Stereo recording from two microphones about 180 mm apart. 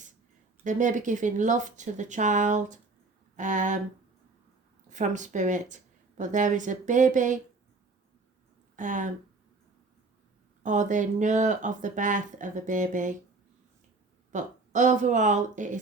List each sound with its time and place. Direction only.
0.6 s speech: 45° right (ahead or behind)
4.9 s speech: 45° right (ahead or behind)
8.7 s speech: 45° right (ahead or behind)
10.6 s speech: 45° right (ahead or behind)
14.3 s speech: 45° right (ahead or behind)